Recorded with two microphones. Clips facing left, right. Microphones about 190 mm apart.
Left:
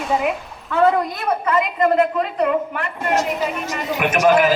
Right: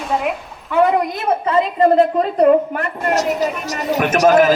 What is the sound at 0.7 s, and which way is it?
A woman's voice, 20° right (ahead or behind).